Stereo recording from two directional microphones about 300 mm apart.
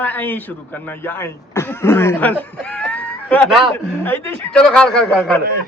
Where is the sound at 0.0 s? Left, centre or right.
Centre.